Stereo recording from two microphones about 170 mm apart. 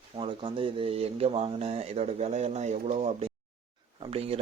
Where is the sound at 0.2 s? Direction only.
30° right (ahead or behind).